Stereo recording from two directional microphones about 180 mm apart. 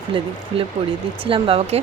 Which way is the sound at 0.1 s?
30° right (ahead or behind).